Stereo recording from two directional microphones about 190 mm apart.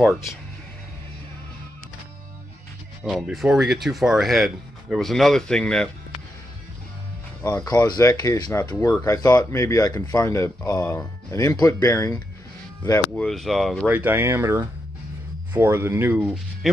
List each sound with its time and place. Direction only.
0.0 s speech: centre (ahead or behind)
3.1 s speech: centre (ahead or behind)
7.4 s speech: 20° left (ahead or behind)
13.1 s speech: 5° left (ahead or behind)